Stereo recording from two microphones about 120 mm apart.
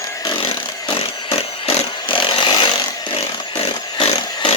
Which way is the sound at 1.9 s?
40° left (ahead or behind).